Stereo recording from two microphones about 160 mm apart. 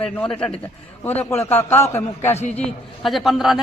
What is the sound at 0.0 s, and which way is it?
A man's voice, 5° left (ahead or behind).